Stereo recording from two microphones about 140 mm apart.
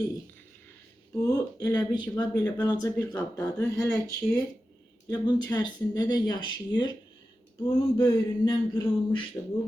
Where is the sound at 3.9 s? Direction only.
5° left (ahead or behind).